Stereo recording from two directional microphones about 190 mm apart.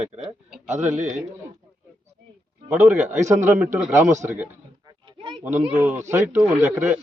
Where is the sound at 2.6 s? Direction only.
10° right (ahead or behind).